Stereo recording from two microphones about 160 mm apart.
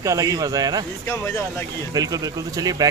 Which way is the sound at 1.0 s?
15° left (ahead or behind).